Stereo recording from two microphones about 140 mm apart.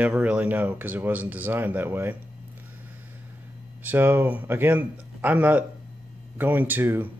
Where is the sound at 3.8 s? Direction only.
15° right (ahead or behind).